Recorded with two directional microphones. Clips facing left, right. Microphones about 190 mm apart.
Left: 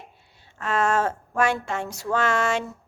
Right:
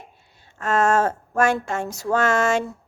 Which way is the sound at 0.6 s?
45° right (ahead or behind).